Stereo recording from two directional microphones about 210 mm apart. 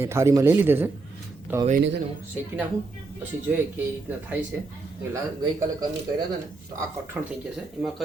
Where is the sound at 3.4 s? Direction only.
10° right (ahead or behind).